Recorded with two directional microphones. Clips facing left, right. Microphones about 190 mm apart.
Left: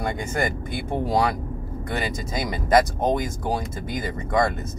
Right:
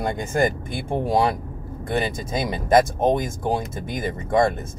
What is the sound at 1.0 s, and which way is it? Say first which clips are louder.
Speech: right 2 dB; 25° right (ahead or behind).